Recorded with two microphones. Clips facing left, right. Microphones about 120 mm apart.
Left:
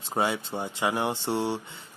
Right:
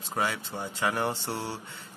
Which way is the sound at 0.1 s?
25° left (ahead or behind).